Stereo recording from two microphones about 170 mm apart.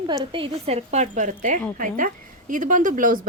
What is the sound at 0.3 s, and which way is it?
Speech, 30° right (ahead or behind).